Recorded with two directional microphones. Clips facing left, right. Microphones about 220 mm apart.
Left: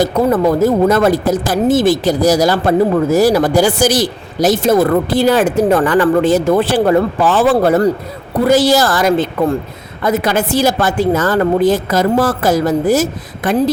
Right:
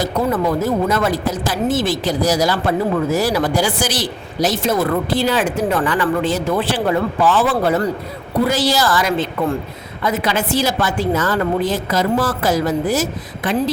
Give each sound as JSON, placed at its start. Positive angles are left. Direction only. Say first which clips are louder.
{"t": 0.3, "sound": "speech", "louder": "left 6 dB", "side_deg": 45}